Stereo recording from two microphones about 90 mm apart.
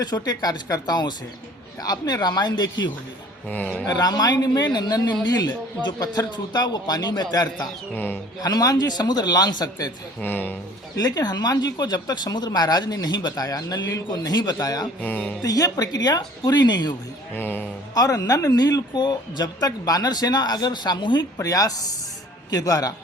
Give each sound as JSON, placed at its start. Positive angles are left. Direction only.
{"t": 0.0, "sound": "speech", "side_deg": 45}
{"t": 3.5, "sound": "speech", "side_deg": 15}
{"t": 3.8, "sound": "speech", "side_deg": 45}
{"t": 7.9, "sound": "speech", "side_deg": 20}
{"t": 8.4, "sound": "speech", "side_deg": 45}
{"t": 10.2, "sound": "speech", "side_deg": 20}
{"t": 10.9, "sound": "speech", "side_deg": 45}
{"t": 15.0, "sound": "speech", "side_deg": 20}
{"t": 15.4, "sound": "speech", "side_deg": 45}
{"t": 17.3, "sound": "speech", "side_deg": 20}
{"t": 17.9, "sound": "speech", "side_deg": 40}
{"t": 21.3, "sound": "speech", "side_deg": 40}